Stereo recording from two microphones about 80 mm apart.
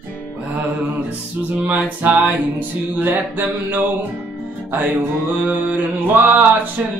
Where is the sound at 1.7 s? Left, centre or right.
Centre.